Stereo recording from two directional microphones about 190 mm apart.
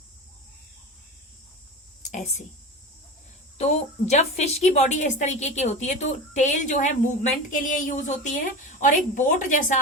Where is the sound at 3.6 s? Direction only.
35° left (ahead or behind).